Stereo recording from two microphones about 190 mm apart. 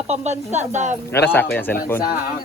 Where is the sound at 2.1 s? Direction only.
55° left (ahead or behind).